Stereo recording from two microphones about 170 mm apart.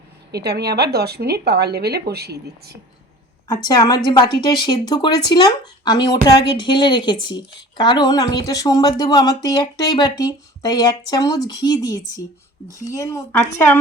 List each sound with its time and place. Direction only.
0.3 s speech: 70° right (ahead or behind)
3.5 s speech: 25° left (ahead or behind)